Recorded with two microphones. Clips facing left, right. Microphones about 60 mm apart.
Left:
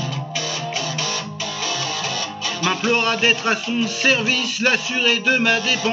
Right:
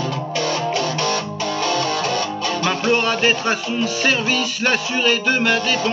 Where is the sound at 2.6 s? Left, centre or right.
Centre.